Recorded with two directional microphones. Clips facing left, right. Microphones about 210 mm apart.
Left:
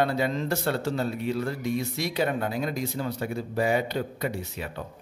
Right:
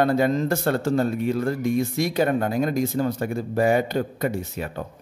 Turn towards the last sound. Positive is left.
turn(degrees=-45)  # may be behind; listen again after turning